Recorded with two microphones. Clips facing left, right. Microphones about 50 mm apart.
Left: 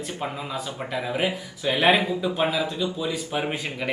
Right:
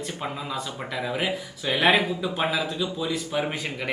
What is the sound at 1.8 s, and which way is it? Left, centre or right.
Speech, centre.